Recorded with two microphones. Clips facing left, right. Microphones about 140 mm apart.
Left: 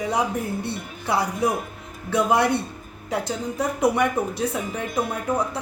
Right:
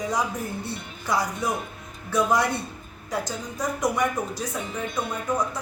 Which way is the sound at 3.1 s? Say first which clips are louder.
Left 4 dB; 65° left (ahead or behind).